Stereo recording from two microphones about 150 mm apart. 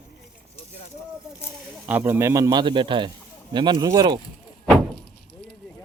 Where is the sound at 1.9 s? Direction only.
10° right (ahead or behind).